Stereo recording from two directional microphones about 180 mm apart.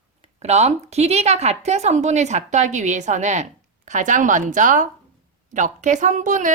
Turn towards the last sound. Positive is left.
turn(degrees=-45)  # may be behind; listen again after turning